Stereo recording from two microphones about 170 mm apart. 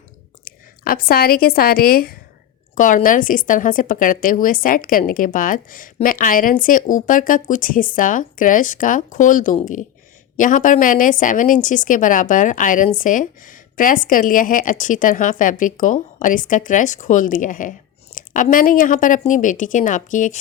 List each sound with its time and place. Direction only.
0.4 s speech: 60° left (ahead or behind)
2.7 s speech: 50° left (ahead or behind)